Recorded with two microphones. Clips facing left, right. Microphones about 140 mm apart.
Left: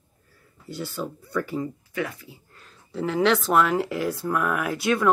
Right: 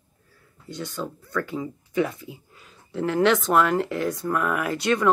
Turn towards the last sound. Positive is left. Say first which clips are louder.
# even
turn(degrees=5)  # may be behind; listen again after turning